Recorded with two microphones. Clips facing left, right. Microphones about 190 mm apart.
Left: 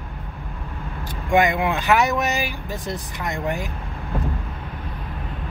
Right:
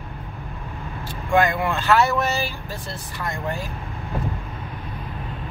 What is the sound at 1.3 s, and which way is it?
Speech, 20° left (ahead or behind).